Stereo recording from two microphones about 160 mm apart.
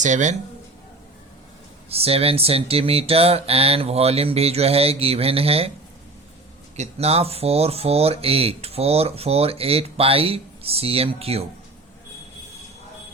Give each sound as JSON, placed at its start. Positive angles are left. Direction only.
{"t": 0.0, "sound": "speech", "side_deg": -50}
{"t": 1.9, "sound": "speech", "side_deg": -40}
{"t": 6.7, "sound": "speech", "side_deg": -40}